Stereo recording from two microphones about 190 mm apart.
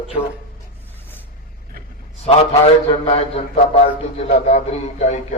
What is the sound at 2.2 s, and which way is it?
A man's voice, 35° left (ahead or behind).